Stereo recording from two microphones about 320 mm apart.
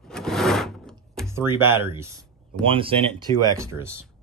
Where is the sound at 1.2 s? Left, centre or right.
Centre.